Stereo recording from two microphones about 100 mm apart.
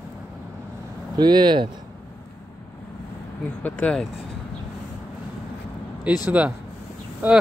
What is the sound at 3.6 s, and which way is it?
Speech, 15° left (ahead or behind).